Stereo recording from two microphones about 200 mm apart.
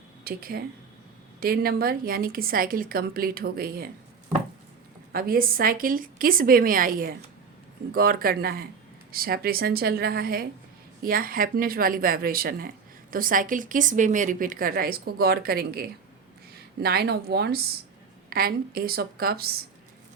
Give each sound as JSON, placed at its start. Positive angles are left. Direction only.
{"t": 0.3, "sound": "speech", "side_deg": -50}
{"t": 5.1, "sound": "speech", "side_deg": -45}